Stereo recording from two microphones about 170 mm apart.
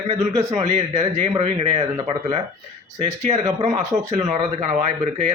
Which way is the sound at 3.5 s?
20° right (ahead or behind).